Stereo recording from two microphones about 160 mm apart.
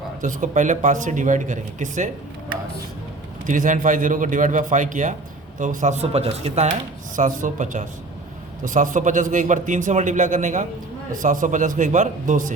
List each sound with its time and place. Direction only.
0.2 s a man's voice: 55° right (ahead or behind)
3.4 s a man's voice: 55° right (ahead or behind)
7.2 s a man's voice: 50° right (ahead or behind)